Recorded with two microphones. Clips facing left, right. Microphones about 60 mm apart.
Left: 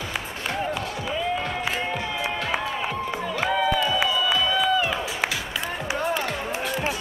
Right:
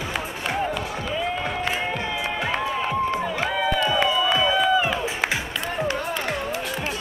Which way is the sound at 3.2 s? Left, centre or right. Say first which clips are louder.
Even; centre.